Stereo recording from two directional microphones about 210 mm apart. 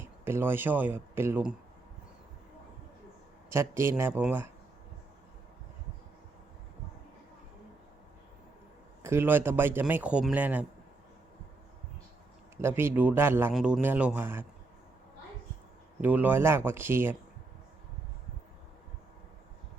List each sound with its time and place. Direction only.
0.0 s speech: 10° right (ahead or behind)
3.5 s a man's voice: 15° right (ahead or behind)
9.0 s a man's voice: 10° right (ahead or behind)
12.6 s a man's voice: 10° right (ahead or behind)
16.0 s a man's voice: 10° right (ahead or behind)